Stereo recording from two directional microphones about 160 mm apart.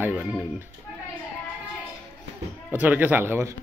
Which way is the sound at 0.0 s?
10° right (ahead or behind).